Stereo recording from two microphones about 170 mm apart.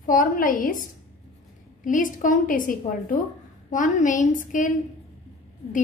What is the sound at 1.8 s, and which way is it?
A woman's voice, 50° left (ahead or behind).